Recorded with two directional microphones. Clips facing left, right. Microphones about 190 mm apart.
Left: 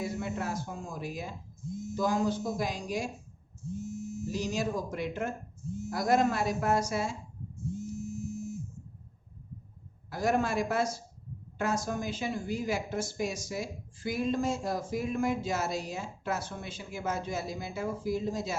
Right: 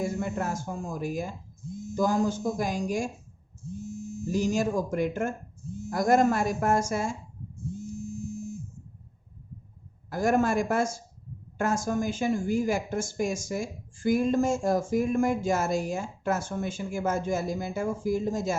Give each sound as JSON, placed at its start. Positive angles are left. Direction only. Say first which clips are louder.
{"t": 0.0, "sound": "speech", "louder": "right 4 dB", "side_deg": -50}
{"t": 4.3, "sound": "speech", "louder": "right 6 dB", "side_deg": -45}
{"t": 10.1, "sound": "speech", "louder": "right 5 dB", "side_deg": -50}